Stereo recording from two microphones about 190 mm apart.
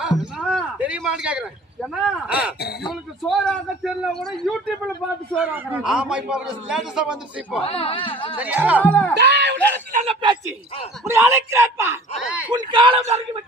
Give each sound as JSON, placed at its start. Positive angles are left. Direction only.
{"t": 0.0, "sound": "a sound", "side_deg": -5}
{"t": 2.9, "sound": "a man's voice", "side_deg": 0}
{"t": 5.4, "sound": "a man's voice", "side_deg": -10}
{"t": 7.6, "sound": "speech", "side_deg": 30}
{"t": 8.4, "sound": "speech", "side_deg": -10}
{"t": 8.8, "sound": "music", "side_deg": 10}
{"t": 9.1, "sound": "speech", "side_deg": -65}
{"t": 10.1, "sound": "a man's voice", "side_deg": -25}
{"t": 11.0, "sound": "speech", "side_deg": -15}
{"t": 12.5, "sound": "a man's voice", "side_deg": -25}